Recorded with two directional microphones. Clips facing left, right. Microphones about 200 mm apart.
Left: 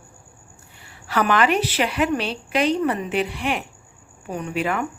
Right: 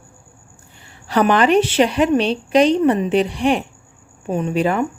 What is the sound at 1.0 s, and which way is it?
Speech, 30° right (ahead or behind).